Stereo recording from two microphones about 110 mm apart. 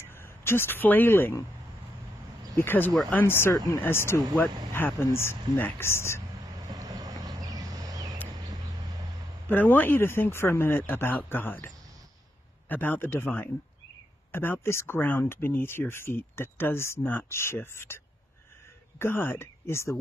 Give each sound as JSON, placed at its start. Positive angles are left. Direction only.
{"t": 0.1, "sound": "speech", "side_deg": 20}
{"t": 2.5, "sound": "speech", "side_deg": 20}
{"t": 6.7, "sound": "a sound", "side_deg": -35}
{"t": 9.5, "sound": "speech", "side_deg": 15}